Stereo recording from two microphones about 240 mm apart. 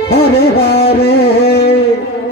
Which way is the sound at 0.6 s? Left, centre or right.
Left.